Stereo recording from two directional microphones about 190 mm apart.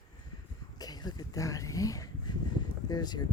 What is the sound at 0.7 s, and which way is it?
Speech, 20° left (ahead or behind).